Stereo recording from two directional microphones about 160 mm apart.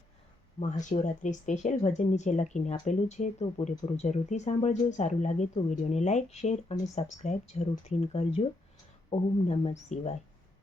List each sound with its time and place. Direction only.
0.6 s speech: 50° left (ahead or behind)